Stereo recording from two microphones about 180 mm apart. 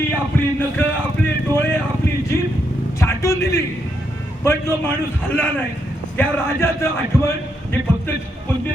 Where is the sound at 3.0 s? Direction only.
15° left (ahead or behind).